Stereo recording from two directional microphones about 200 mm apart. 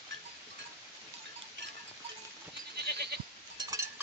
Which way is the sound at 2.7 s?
55° right (ahead or behind).